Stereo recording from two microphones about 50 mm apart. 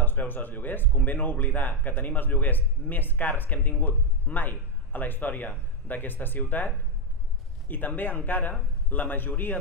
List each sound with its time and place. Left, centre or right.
0.0 s speech: left